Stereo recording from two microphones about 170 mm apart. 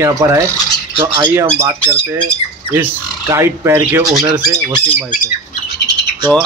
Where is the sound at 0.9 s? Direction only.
30° right (ahead or behind).